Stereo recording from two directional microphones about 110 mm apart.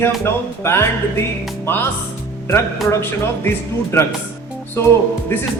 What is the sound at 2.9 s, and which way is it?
A man's voice, 20° left (ahead or behind).